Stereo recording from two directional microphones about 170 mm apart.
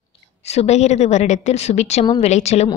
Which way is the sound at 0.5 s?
40° left (ahead or behind).